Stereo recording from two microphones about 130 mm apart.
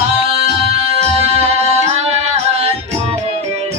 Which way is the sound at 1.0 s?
55° right (ahead or behind).